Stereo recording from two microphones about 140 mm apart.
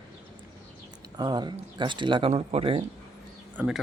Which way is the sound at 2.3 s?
45° right (ahead or behind).